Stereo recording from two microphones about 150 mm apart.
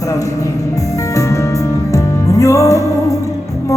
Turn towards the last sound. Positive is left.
turn(degrees=20)  # may be behind; listen again after turning